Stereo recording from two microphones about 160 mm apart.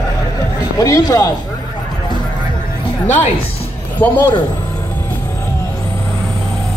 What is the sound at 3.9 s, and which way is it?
Speech, 10° left (ahead or behind).